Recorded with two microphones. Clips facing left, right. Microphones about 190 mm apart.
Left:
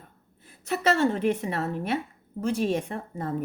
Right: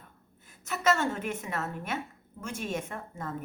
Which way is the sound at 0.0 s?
35° left (ahead or behind).